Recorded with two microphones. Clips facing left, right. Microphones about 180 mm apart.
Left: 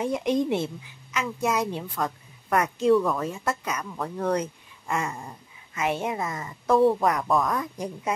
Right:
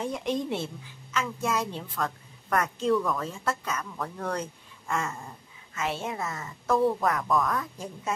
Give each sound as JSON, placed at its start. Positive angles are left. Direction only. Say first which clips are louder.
{"t": 0.0, "sound": "a woman's voice", "louder": "left 5 dB", "side_deg": 10}
{"t": 2.9, "sound": "a woman's voice", "louder": "left 5 dB", "side_deg": 25}
{"t": 3.2, "sound": "a woman's voice", "louder": "left 3 dB", "side_deg": 10}
{"t": 6.7, "sound": "a woman's voice", "louder": "left 5 dB", "side_deg": 30}
{"t": 7.0, "sound": "a woman's voice", "louder": "left 3 dB", "side_deg": 15}